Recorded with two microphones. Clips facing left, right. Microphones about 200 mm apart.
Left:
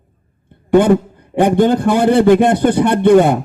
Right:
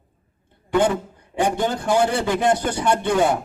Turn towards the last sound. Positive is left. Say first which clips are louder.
# left 9 dB
turn(degrees=55)  # may be behind; listen again after turning